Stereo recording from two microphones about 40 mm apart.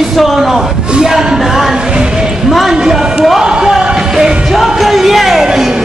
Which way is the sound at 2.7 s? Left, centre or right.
Centre.